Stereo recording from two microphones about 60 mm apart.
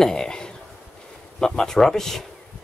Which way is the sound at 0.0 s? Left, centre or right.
Centre.